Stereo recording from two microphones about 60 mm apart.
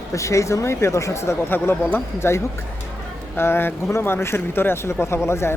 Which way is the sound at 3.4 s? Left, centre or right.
Left.